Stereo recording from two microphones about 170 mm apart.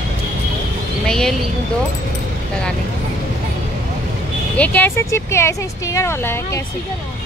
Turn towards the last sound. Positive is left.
turn(degrees=15)  # may be behind; listen again after turning